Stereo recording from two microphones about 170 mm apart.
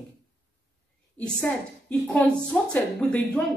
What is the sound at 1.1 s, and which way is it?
A woman's voice, 10° left (ahead or behind).